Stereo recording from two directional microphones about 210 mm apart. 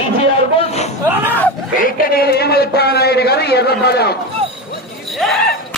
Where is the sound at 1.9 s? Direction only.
45° left (ahead or behind).